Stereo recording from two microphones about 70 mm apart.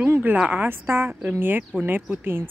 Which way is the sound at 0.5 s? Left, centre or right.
Right.